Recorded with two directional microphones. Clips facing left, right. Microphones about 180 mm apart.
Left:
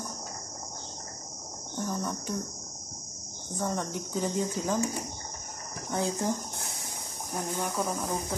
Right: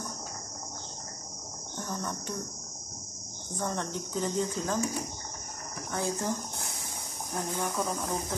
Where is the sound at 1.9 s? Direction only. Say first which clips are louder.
Left 3 dB; 5° left (ahead or behind).